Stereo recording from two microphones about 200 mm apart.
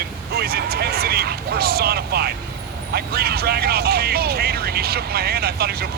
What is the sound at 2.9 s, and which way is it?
Speech, 50° right (ahead or behind).